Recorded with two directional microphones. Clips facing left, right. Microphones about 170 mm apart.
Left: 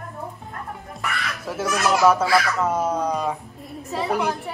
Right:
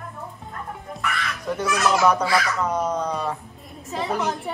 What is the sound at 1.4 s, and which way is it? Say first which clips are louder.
A woman's voice: right 1 dB; 5° left (ahead or behind).